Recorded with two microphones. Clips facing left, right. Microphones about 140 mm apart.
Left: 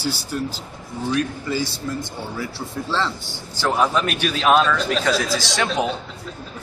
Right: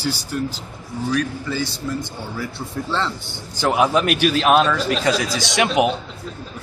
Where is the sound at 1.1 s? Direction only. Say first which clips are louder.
Even; 5° left (ahead or behind).